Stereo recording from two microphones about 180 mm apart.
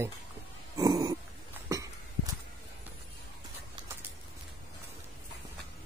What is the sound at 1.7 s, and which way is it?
Cough, 20° right (ahead or behind).